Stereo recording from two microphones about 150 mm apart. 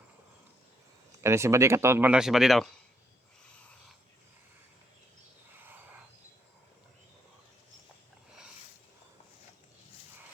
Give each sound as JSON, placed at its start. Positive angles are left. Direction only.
{"t": 1.2, "sound": "speech", "side_deg": -20}